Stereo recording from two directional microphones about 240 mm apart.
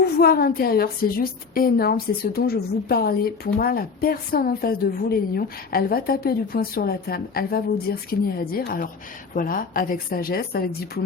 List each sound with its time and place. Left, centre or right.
0.0 s a woman's voice: left